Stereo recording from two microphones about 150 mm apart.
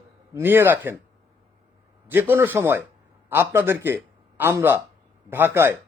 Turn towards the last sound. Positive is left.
turn(degrees=-15)  # may be behind; listen again after turning